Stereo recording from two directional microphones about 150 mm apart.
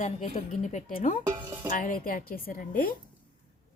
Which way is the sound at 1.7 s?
65° left (ahead or behind).